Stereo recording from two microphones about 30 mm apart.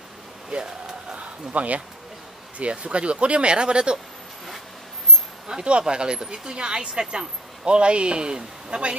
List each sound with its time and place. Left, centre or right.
1.1 s a sound: right
2.6 s a woman's voice: right
5.6 s a woman's voice: right